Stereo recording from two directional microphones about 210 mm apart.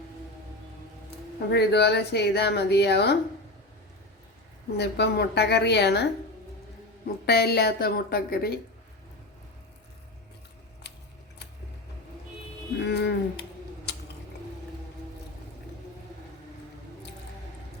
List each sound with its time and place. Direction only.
1.5 s speech: 50° left (ahead or behind)
4.8 s speech: 50° left (ahead or behind)
7.3 s speech: 50° left (ahead or behind)
10.8 s typewriter: 50° left (ahead or behind)
12.8 s speech: 50° left (ahead or behind)